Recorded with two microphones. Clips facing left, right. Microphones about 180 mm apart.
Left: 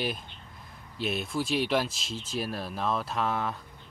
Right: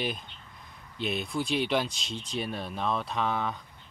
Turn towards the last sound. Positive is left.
turn(degrees=0)  # may be behind; listen again after turning